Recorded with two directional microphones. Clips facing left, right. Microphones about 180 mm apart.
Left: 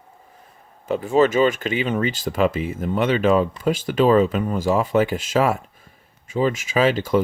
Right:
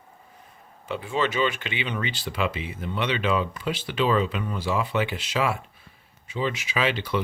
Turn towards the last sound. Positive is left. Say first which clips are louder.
# left 7 dB
turn(degrees=45)  # may be behind; listen again after turning